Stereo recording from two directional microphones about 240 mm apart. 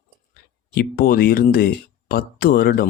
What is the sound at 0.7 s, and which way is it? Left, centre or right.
Speech, left.